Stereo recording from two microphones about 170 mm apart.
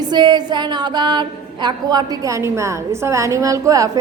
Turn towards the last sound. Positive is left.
turn(degrees=-20)  # may be behind; listen again after turning